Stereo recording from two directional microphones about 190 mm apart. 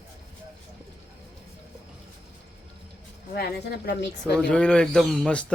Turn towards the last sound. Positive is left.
turn(degrees=5)  # may be behind; listen again after turning